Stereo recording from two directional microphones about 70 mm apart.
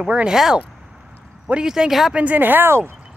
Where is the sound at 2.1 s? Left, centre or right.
Right.